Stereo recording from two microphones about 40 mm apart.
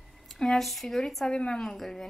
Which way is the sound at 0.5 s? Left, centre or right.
Centre.